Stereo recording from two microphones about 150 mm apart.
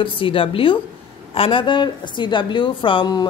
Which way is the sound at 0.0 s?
35° left (ahead or behind).